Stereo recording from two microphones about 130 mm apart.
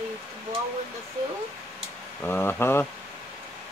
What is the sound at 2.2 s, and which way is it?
Speech, 15° left (ahead or behind).